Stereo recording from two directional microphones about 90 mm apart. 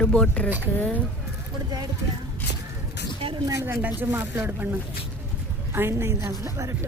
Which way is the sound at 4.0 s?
25° right (ahead or behind).